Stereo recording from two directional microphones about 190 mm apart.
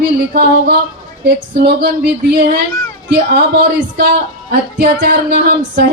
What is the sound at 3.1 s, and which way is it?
A woman's voice, 60° right (ahead or behind).